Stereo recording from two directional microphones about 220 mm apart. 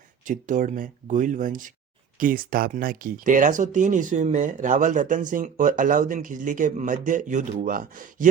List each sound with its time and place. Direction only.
0.3 s speech: 35° right (ahead or behind)